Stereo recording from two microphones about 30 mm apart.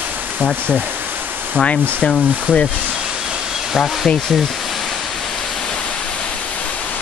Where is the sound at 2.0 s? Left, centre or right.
Centre.